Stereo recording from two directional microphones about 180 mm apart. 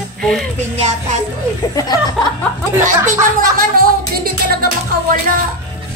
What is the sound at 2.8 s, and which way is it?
Music, 45° right (ahead or behind).